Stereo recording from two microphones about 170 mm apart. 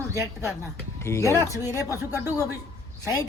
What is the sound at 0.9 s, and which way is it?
Speech, 15° left (ahead or behind).